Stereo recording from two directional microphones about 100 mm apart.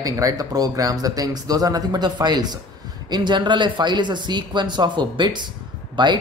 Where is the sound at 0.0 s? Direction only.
35° right (ahead or behind).